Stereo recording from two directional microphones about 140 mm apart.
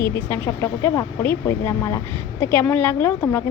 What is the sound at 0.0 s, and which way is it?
A woman's voice, 15° left (ahead or behind).